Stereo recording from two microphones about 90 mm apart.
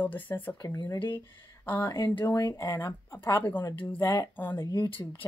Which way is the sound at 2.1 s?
55° left (ahead or behind).